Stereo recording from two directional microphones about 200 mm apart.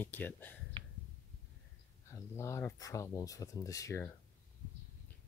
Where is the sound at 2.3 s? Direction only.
15° left (ahead or behind).